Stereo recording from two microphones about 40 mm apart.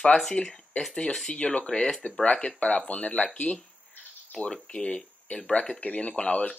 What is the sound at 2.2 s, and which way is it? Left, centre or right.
Speech, left.